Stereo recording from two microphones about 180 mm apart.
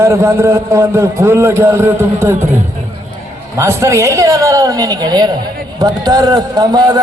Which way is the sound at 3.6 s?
15° right (ahead or behind).